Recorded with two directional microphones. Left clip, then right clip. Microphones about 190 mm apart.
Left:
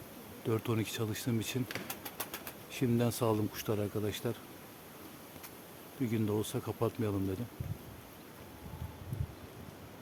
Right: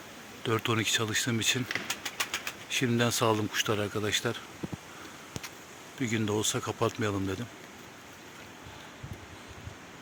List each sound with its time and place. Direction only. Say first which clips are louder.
0.4 s speech: right 6 dB; 5° left (ahead or behind)
1.6 s pigeon: right 8 dB; 45° left (ahead or behind)
2.6 s speech: right 5 dB; 5° left (ahead or behind)
6.0 s speech: right 4 dB; centre (ahead or behind)